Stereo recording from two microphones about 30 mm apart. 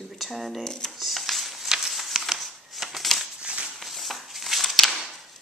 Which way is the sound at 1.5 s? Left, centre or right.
Centre.